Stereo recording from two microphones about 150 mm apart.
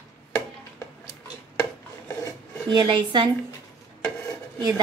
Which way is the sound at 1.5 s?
15° left (ahead or behind).